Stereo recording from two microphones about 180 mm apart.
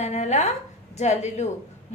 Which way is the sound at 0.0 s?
40° left (ahead or behind).